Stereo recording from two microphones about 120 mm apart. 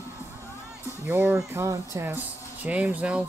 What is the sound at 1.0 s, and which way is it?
Speech, 15° right (ahead or behind).